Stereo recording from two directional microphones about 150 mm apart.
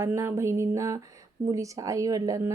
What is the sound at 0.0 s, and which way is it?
Speech, 15° right (ahead or behind).